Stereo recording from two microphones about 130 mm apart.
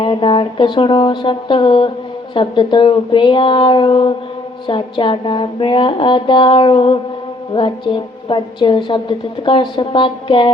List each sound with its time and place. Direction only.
0.0 s a woman's voice: 40° left (ahead or behind)